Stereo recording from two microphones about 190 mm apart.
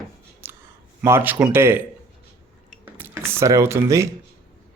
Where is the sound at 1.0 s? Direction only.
10° right (ahead or behind).